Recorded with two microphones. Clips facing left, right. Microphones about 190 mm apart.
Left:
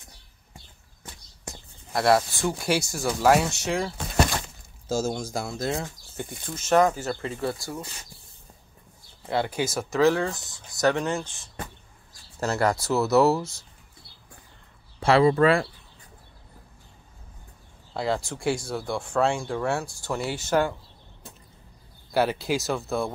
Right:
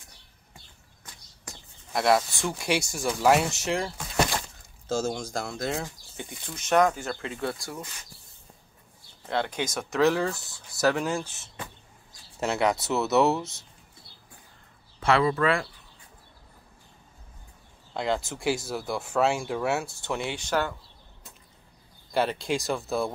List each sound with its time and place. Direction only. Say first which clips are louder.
2.0 s speech: left 2 dB; centre (ahead or behind)
9.2 s speech: left 3 dB; 10° left (ahead or behind); by 11.2 s 5° right (ahead or behind)
12.4 s speech: left 1 dB; centre (ahead or behind)
15.0 s speech: left 5 dB; 30° left (ahead or behind)
17.9 s speech: left 1 dB; centre (ahead or behind)
22.1 s speech: left 2 dB; 5° left (ahead or behind)